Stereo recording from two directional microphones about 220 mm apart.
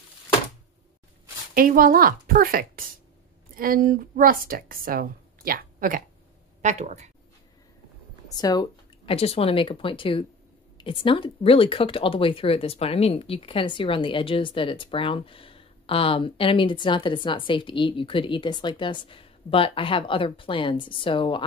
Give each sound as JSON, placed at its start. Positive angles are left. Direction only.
{"t": 1.5, "sound": "a woman's voice", "side_deg": -40}
{"t": 8.4, "sound": "speech", "side_deg": 20}